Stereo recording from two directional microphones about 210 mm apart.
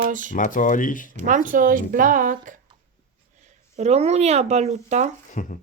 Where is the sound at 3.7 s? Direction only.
30° right (ahead or behind).